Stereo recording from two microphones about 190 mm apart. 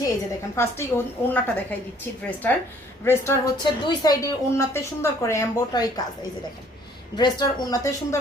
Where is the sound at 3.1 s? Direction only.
15° left (ahead or behind).